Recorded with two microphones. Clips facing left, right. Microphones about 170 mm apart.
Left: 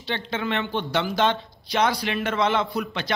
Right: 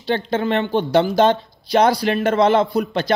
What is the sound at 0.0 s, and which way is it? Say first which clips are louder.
A man's voice: right 8 dB; 40° right (ahead or behind).